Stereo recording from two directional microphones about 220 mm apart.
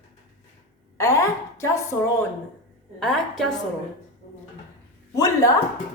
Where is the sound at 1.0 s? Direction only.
15° left (ahead or behind).